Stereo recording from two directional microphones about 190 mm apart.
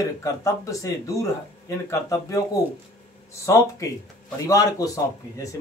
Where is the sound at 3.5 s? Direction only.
15° left (ahead or behind).